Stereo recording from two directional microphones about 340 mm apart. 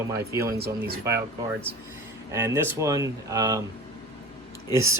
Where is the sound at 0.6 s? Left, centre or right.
Right.